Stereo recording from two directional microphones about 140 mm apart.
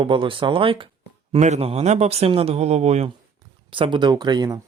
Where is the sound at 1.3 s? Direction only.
50° right (ahead or behind).